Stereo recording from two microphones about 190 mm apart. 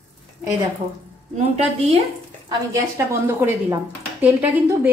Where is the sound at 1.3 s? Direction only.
35° right (ahead or behind).